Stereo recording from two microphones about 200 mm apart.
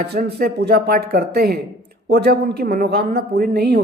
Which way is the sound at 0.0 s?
55° right (ahead or behind).